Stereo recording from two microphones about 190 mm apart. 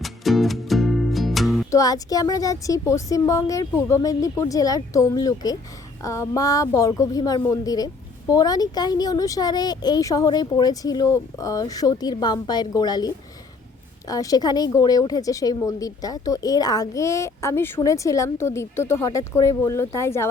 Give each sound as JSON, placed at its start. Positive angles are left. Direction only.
{"t": 0.0, "sound": "music", "side_deg": 0}
{"t": 1.7, "sound": "speech", "side_deg": 20}